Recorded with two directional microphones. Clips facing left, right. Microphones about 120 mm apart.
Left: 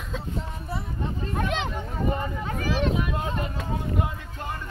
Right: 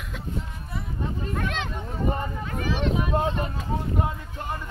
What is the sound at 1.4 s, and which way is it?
Speech, 20° left (ahead or behind).